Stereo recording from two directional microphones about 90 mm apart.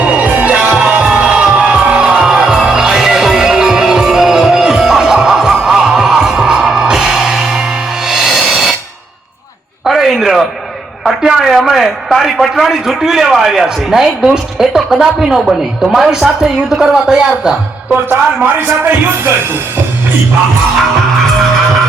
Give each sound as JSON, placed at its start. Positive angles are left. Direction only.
{"t": 0.0, "sound": "music", "side_deg": -15}
{"t": 9.8, "sound": "a sound", "side_deg": -5}
{"t": 11.0, "sound": "a man's voice", "side_deg": -5}
{"t": 17.9, "sound": "speech", "side_deg": -20}